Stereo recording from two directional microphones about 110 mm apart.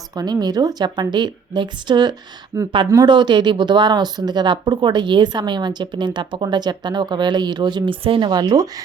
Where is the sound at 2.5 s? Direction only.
25° right (ahead or behind).